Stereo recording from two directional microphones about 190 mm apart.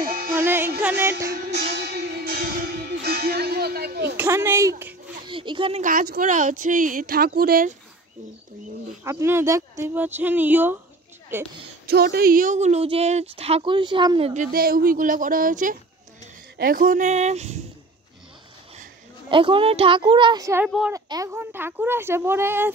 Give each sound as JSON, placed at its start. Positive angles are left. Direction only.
{"t": 0.0, "sound": "music", "side_deg": -50}
{"t": 0.4, "sound": "music", "side_deg": -10}
{"t": 0.7, "sound": "speech", "side_deg": -10}
{"t": 1.3, "sound": "music", "side_deg": -60}
{"t": 4.2, "sound": "speech", "side_deg": -15}
{"t": 5.2, "sound": "speech", "side_deg": -25}
{"t": 5.8, "sound": "speech", "side_deg": -45}
{"t": 9.0, "sound": "speech", "side_deg": -15}
{"t": 11.8, "sound": "speech", "side_deg": -55}
{"t": 14.3, "sound": "speech", "side_deg": -45}
{"t": 19.2, "sound": "speech", "side_deg": -25}
{"t": 20.6, "sound": "speech", "side_deg": -5}
{"t": 20.9, "sound": "speech", "side_deg": -15}